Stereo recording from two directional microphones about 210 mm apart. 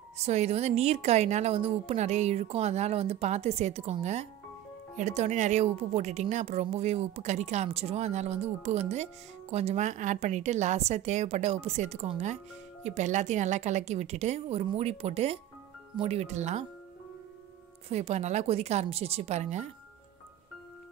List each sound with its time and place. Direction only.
0.2 s a woman's voice: 30° right (ahead or behind)
17.8 s a woman's voice: 30° right (ahead or behind)